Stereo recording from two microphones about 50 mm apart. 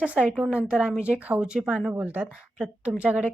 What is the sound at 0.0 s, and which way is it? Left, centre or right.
Speech, right.